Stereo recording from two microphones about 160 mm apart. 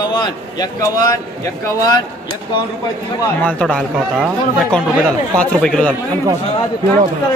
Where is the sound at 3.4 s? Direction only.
10° left (ahead or behind).